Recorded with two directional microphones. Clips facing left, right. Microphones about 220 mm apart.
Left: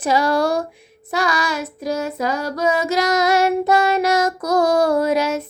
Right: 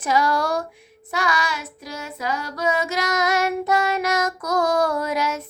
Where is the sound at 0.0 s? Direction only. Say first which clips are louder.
Left 4 dB; 30° left (ahead or behind).